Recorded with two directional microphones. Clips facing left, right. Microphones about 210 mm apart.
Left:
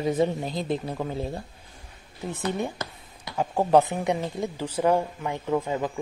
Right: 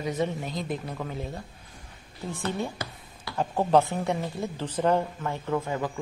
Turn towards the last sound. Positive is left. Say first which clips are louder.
# left 2 dB
turn(degrees=15)  # may be behind; listen again after turning